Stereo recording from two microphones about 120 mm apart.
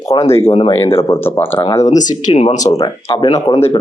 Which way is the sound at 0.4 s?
50° left (ahead or behind).